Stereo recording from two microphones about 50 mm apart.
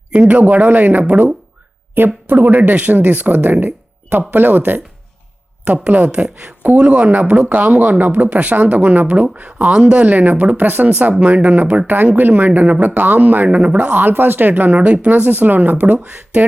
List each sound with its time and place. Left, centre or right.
0.1 s speech: right
2.0 s a woman's voice: right
2.3 s speech: right
13.6 s speech: right
13.9 s speech: right
15.2 s speech: right